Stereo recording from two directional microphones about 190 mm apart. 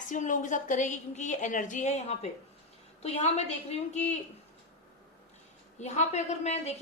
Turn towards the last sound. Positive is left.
turn(degrees=35)  # may be behind; listen again after turning